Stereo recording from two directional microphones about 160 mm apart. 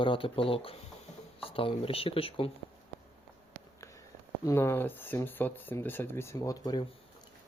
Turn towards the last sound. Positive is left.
turn(degrees=25)  # may be behind; listen again after turning